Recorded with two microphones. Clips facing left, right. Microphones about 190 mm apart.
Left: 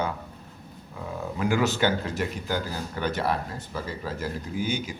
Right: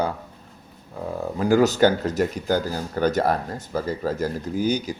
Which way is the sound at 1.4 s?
40° right (ahead or behind).